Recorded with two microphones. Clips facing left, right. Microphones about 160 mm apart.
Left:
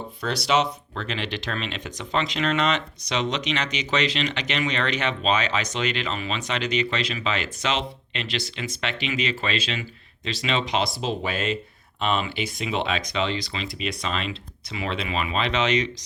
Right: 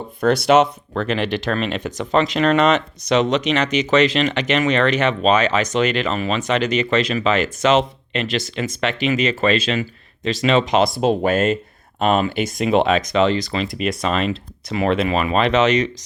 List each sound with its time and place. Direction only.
0.2 s speech: 50° right (ahead or behind)